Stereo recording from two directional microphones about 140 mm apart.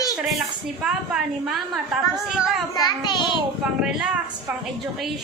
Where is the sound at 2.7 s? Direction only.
30° left (ahead or behind).